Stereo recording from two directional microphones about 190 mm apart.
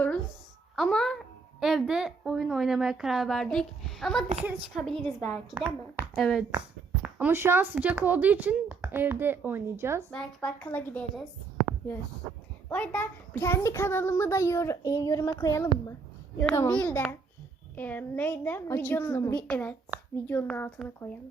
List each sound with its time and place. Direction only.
0.8 s a woman's voice: 5° left (ahead or behind)
7.0 s speech: 10° right (ahead or behind)
10.1 s a woman's voice: 5° left (ahead or behind)
12.6 s a child's voice: 5° left (ahead or behind)